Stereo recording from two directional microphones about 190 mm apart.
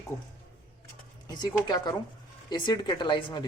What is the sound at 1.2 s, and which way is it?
Speech, 20° left (ahead or behind).